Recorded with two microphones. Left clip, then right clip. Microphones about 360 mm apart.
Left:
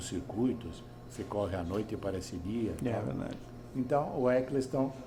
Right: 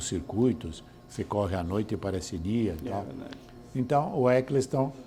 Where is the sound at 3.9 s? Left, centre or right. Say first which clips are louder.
Right 5 dB; right.